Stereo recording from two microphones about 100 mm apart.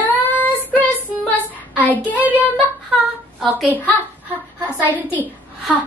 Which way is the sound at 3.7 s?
20° left (ahead or behind).